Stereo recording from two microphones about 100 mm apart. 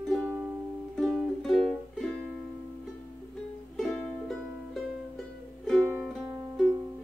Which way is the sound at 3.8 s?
Centre (ahead or behind).